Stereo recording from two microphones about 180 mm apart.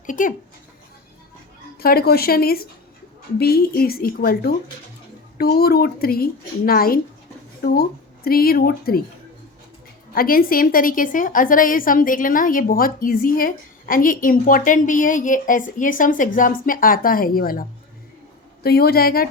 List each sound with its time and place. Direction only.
0.0 s speech: 45° left (ahead or behind)
1.8 s a woman's voice: 55° left (ahead or behind)
10.2 s a woman's voice: 50° left (ahead or behind)